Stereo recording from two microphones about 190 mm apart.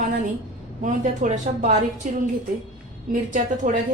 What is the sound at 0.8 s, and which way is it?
Speech, 40° right (ahead or behind).